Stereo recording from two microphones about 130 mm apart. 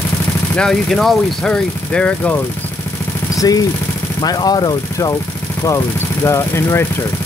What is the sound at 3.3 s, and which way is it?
Speech, 25° left (ahead or behind).